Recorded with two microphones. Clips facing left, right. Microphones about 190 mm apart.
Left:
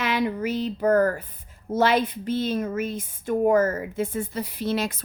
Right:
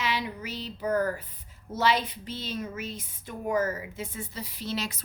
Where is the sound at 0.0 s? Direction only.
55° left (ahead or behind).